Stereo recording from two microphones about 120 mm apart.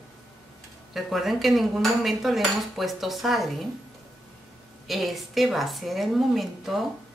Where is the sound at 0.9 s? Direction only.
Centre (ahead or behind).